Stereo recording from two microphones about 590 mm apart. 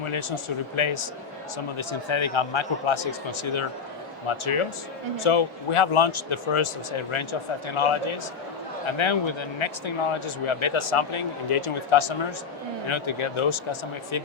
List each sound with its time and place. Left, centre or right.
0.0 s speech: left